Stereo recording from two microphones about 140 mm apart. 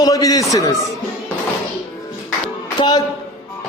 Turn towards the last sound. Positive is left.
turn(degrees=35)  # may be behind; listen again after turning